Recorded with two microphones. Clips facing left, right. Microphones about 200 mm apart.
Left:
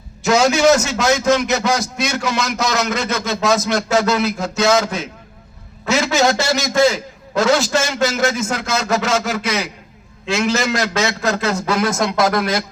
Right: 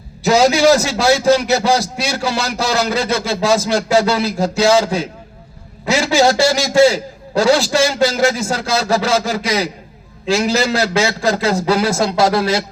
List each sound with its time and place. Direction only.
0.2 s a man's voice: 35° right (ahead or behind)